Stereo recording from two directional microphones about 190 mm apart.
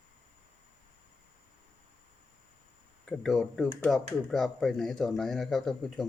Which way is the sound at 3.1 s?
Centre (ahead or behind).